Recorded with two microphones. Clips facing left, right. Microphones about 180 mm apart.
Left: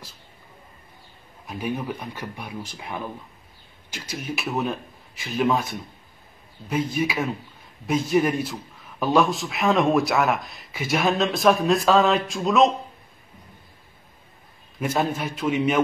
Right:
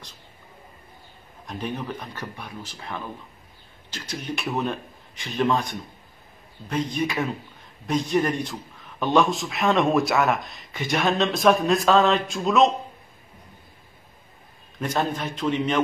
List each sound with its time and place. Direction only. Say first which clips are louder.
1.4 s a man's voice: left 2 dB; 5° left (ahead or behind)
14.8 s a man's voice: left 1 dB; 10° left (ahead or behind)